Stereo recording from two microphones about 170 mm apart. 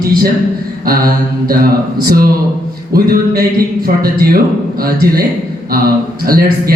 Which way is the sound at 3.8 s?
60° right (ahead or behind).